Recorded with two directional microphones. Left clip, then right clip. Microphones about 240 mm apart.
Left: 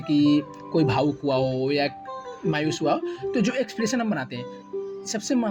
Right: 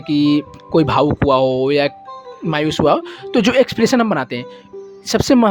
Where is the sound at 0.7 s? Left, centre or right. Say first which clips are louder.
Right 9 dB; right.